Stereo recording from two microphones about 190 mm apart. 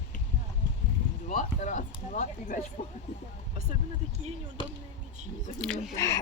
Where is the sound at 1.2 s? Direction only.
40° left (ahead or behind).